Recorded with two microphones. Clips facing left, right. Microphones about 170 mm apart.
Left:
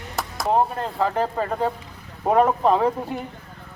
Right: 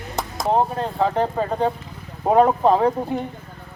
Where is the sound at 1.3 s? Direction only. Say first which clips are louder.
Right 2 dB; 20° right (ahead or behind).